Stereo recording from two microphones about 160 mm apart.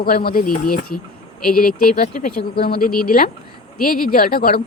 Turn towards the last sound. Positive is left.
turn(degrees=65)  # may be behind; listen again after turning